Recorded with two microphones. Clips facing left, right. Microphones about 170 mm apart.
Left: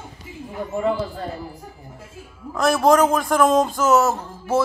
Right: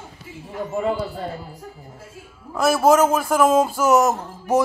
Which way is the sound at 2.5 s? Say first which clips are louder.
Even; 5° right (ahead or behind).